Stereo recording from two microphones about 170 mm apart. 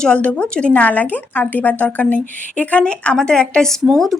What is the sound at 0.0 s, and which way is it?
A woman's voice, 5° left (ahead or behind).